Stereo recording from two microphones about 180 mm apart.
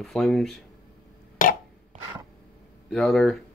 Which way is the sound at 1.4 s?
50° left (ahead or behind).